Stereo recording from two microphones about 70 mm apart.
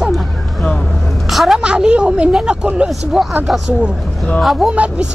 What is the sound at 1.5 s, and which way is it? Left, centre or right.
Speech, centre.